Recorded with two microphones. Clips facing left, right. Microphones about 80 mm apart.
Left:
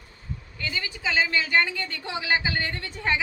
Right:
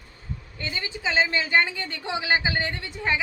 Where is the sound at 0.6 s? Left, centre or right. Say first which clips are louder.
Even; right.